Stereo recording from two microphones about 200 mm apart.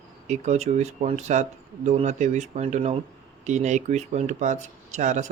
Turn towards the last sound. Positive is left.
turn(degrees=-35)  # may be behind; listen again after turning